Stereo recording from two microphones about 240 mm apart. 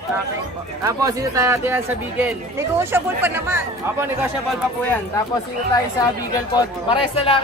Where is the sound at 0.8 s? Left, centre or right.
Centre.